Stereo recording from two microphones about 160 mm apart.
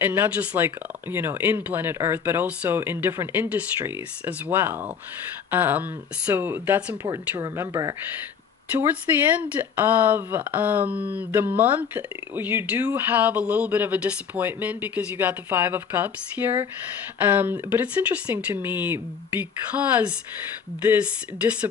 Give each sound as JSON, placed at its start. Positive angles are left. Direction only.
{"t": 0.0, "sound": "speech", "side_deg": -15}
{"t": 7.0, "sound": "speech", "side_deg": -20}